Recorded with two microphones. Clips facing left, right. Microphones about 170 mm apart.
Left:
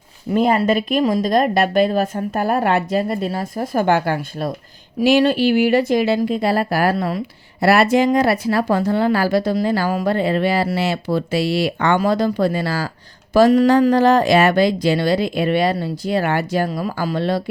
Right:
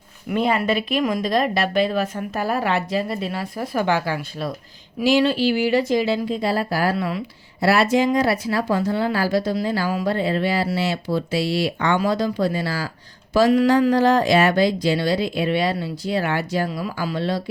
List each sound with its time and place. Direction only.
0.3 s speech: 40° left (ahead or behind)
1.0 s speech: 30° left (ahead or behind)
1.3 s speech: 45° left (ahead or behind); by 6.9 s 60° left (ahead or behind)
6.9 s speech: 40° left (ahead or behind)
7.6 s speech: 60° left (ahead or behind)
13.3 s speech: 45° left (ahead or behind)